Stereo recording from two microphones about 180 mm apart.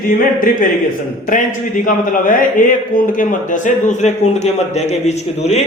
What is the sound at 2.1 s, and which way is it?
A man's voice, 50° left (ahead or behind).